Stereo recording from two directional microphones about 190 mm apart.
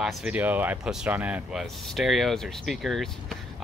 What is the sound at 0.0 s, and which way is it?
Speech, 5° right (ahead or behind).